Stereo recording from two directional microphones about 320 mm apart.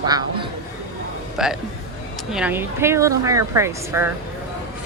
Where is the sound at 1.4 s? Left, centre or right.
Centre.